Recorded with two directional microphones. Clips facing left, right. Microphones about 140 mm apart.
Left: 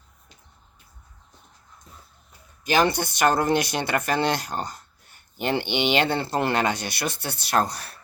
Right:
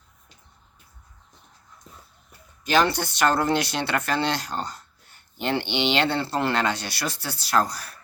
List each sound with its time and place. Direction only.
2.7 s speech: 15° left (ahead or behind)